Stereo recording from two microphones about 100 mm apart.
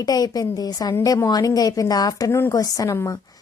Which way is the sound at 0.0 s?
40° left (ahead or behind).